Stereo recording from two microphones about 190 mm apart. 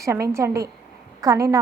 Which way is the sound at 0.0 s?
15° right (ahead or behind).